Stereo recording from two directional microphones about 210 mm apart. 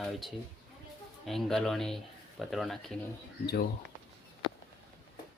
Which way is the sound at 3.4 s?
50° left (ahead or behind).